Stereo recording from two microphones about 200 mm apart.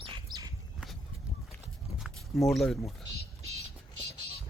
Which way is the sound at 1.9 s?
Centre (ahead or behind).